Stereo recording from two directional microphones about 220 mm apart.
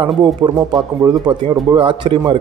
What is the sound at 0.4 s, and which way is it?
Speech, 20° right (ahead or behind).